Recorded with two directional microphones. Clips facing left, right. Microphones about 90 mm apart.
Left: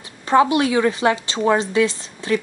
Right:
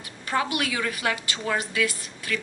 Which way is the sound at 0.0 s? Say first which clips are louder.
Left 11 dB; 30° left (ahead or behind).